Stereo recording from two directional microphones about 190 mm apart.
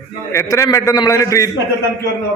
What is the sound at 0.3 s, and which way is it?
A man's voice, 15° left (ahead or behind).